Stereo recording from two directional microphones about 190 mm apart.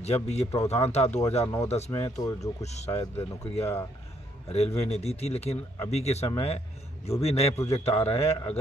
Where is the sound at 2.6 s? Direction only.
35° left (ahead or behind).